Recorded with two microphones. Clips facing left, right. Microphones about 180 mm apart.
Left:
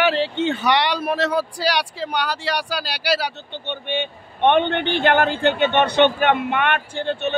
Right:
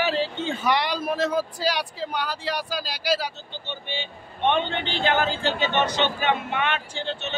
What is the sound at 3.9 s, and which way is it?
A man's voice, 60° left (ahead or behind).